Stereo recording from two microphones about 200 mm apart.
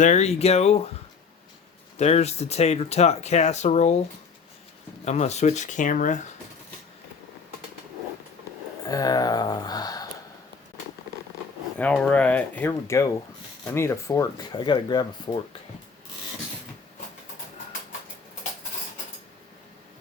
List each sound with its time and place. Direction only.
0.0 s speech: 35° left (ahead or behind)
2.0 s speech: 35° left (ahead or behind)
5.0 s speech: 35° left (ahead or behind)
8.9 s speech: 20° left (ahead or behind)
11.8 s speech: 5° left (ahead or behind)